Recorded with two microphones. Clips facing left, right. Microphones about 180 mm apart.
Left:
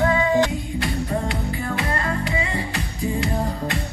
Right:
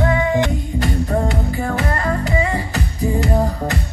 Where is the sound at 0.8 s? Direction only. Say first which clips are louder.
Right 6 dB; 45° right (ahead or behind).